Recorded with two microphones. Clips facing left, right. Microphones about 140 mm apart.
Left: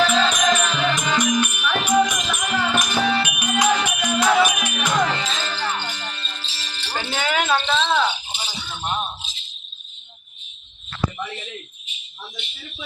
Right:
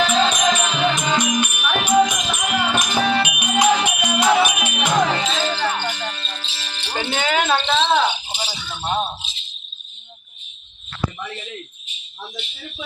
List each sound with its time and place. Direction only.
0.0 s music: 20° right (ahead or behind)
4.3 s music: 25° right (ahead or behind)
5.2 s music: 70° right (ahead or behind)
6.0 s music: 25° right (ahead or behind)
6.7 s music: 60° right (ahead or behind)
6.9 s a sound: 20° right (ahead or behind)
8.3 s rattle: 90° right